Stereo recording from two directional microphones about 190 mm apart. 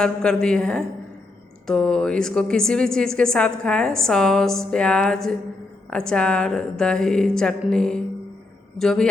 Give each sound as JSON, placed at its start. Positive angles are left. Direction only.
{"t": 0.0, "sound": "a woman's voice", "side_deg": 5}